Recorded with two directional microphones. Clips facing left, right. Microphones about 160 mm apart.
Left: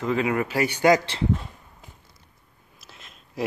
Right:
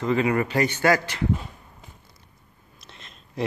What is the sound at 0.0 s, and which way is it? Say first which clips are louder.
Speech: right 2 dB; centre (ahead or behind).